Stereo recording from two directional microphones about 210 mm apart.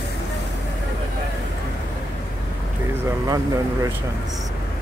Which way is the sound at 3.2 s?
15° right (ahead or behind).